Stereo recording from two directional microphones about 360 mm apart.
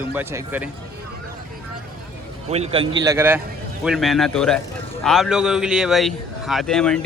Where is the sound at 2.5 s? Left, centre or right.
Centre.